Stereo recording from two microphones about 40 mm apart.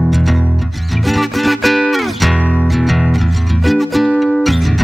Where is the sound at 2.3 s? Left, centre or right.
Left.